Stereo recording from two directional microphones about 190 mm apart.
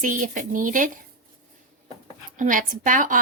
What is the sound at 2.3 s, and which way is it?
Speech, 45° right (ahead or behind).